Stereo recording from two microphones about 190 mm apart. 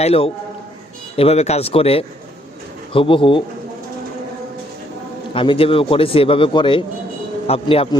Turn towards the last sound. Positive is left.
turn(degrees=30)  # may be behind; listen again after turning